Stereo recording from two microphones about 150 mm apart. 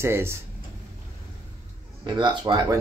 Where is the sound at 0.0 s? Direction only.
15° right (ahead or behind).